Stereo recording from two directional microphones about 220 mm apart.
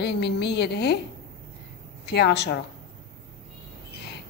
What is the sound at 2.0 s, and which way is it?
Speech, 50° left (ahead or behind).